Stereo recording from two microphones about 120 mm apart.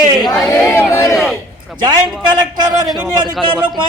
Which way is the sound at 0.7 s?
20° left (ahead or behind).